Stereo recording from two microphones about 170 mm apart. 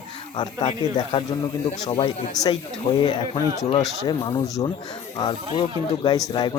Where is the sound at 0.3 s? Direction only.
25° left (ahead or behind).